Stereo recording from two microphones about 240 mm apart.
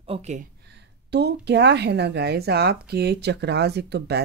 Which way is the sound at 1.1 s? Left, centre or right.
Right.